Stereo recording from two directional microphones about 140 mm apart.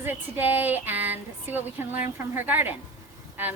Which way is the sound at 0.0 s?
15° right (ahead or behind).